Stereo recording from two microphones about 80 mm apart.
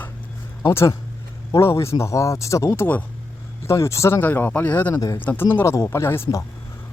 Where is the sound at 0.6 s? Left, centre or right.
Left.